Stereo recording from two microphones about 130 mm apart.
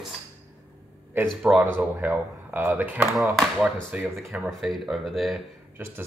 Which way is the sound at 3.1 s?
Centre (ahead or behind).